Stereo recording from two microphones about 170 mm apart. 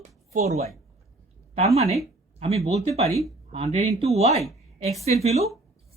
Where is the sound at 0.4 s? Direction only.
40° right (ahead or behind).